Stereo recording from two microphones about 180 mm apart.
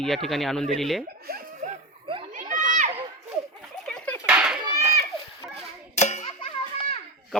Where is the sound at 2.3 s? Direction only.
45° right (ahead or behind).